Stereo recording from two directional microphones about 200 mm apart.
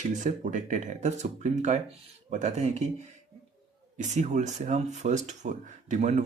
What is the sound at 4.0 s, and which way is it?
Speech, 35° right (ahead or behind).